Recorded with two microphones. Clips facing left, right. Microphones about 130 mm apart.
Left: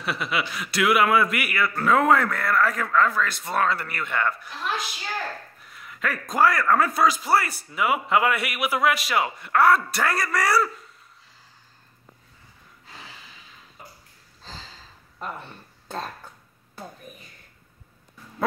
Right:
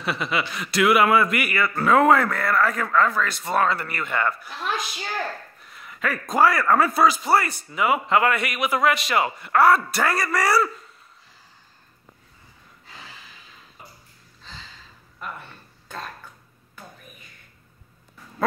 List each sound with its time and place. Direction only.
0.0 s a man's voice: centre (ahead or behind)
5.7 s a man's voice: centre (ahead or behind)
14.4 s a sound: 35° left (ahead or behind)